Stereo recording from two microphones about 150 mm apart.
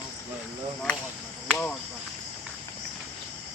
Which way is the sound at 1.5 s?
10° left (ahead or behind).